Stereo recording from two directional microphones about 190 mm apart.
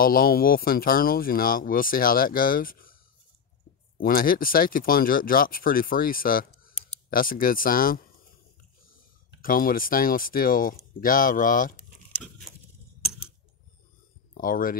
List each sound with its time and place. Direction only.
0.0 s speech: 50° left (ahead or behind)
4.0 s speech: 50° left (ahead or behind)
9.4 s speech: 45° left (ahead or behind)
14.3 s speech: 45° left (ahead or behind)